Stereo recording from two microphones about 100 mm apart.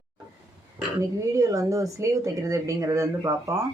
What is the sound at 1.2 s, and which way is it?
Speech, 35° right (ahead or behind).